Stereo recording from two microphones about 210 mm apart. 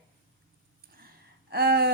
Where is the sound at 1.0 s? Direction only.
45° right (ahead or behind).